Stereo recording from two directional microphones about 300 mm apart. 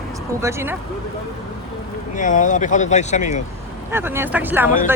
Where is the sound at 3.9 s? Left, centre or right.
Centre.